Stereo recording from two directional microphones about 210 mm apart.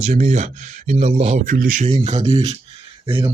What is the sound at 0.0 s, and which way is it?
Speech, 35° right (ahead or behind).